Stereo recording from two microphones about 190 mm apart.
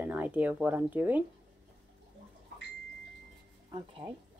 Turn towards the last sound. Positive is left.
turn(degrees=-30)  # may be behind; listen again after turning